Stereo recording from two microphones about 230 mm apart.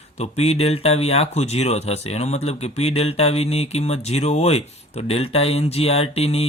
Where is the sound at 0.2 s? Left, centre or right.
Left.